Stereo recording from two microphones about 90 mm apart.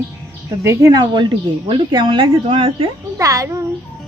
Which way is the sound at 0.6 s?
35° right (ahead or behind).